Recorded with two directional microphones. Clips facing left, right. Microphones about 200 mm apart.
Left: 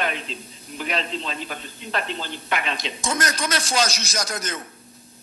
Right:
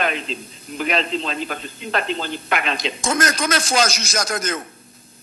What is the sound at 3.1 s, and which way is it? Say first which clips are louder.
Speech: right 4 dB; 90° right.